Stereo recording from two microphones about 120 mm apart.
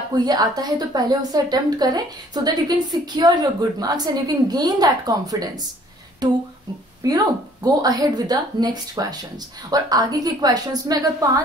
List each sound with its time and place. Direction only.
0.1 s a woman's voice: 35° right (ahead or behind)
7.6 s a woman's voice: 35° right (ahead or behind)